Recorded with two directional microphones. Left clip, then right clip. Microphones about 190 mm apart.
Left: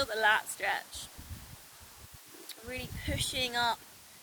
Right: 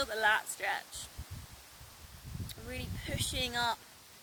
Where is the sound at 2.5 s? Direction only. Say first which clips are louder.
Left 3 dB; 5° right (ahead or behind).